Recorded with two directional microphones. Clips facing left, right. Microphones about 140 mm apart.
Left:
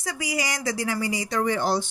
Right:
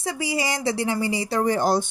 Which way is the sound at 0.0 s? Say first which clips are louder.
Right 3 dB; 25° right (ahead or behind).